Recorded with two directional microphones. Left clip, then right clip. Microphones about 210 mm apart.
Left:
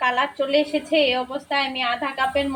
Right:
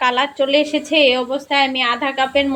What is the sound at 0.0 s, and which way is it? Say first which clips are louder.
A woman's voice: right 5 dB; 25° right (ahead or behind).